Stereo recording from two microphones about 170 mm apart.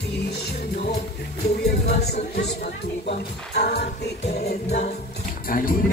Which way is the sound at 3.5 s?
70° left (ahead or behind).